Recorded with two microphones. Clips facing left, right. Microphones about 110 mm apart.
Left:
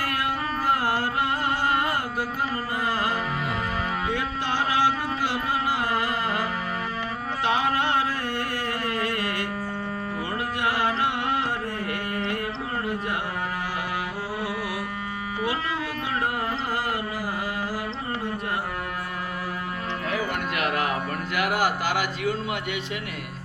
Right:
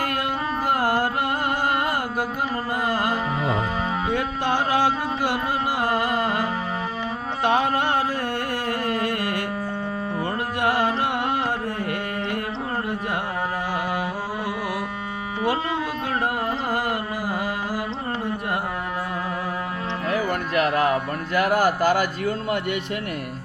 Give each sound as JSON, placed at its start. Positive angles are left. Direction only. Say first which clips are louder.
{"t": 0.7, "sound": "carnatic music", "louder": "right 3 dB", "side_deg": -50}
{"t": 4.1, "sound": "music", "louder": "right 4 dB", "side_deg": -50}
{"t": 7.4, "sound": "music", "louder": "right 3 dB", "side_deg": -50}
{"t": 20.6, "sound": "music", "louder": "right 7 dB", "side_deg": -35}